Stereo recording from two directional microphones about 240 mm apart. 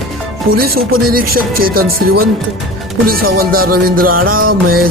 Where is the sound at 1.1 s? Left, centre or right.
Right.